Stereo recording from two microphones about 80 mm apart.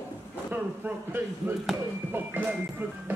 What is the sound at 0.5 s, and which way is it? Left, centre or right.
Speech, right.